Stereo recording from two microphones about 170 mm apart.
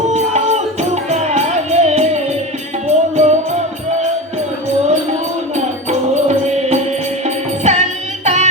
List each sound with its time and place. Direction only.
0.1 s music: 40° right (ahead or behind)
6.2 s music: 40° right (ahead or behind)